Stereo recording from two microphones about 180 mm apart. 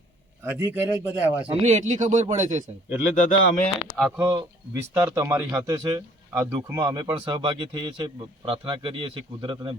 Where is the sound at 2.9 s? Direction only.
45° left (ahead or behind).